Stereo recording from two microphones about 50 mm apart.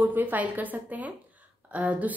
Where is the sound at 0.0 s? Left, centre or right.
Right.